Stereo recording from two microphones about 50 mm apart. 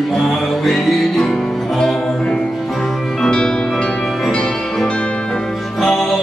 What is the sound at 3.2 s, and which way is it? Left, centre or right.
Music, centre.